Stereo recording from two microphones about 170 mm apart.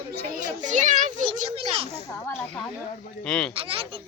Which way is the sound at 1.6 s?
35° right (ahead or behind).